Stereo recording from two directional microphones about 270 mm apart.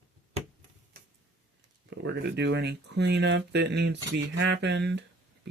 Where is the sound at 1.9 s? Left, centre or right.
Right.